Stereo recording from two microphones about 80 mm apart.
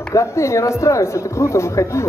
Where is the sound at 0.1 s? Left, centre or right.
Left.